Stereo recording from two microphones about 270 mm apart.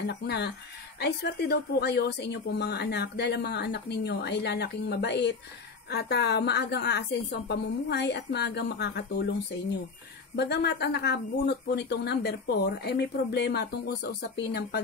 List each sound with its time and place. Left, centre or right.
0.0 s speech: left
10.3 s speech: left